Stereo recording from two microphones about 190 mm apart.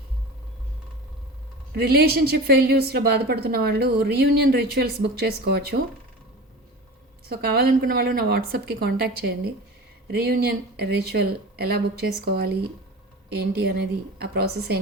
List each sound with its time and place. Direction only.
1.7 s a woman's voice: 55° right (ahead or behind)
7.3 s a woman's voice: 55° right (ahead or behind)